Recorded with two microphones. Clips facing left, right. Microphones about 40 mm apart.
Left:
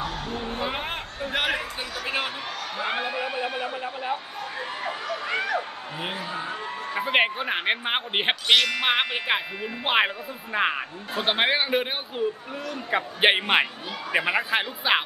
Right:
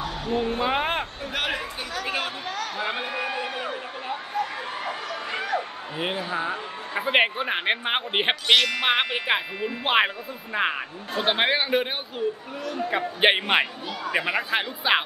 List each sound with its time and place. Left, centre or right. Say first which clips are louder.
0.3 s a woman's voice: right 6 dB; right
0.6 s a sound: right 5 dB; right
1.3 s chatter: left 2 dB; centre
5.3 s a sound: left 1 dB; left
5.9 s speech: right 4 dB; right
6.9 s speech: right 1 dB; centre
12.9 s speech: even; centre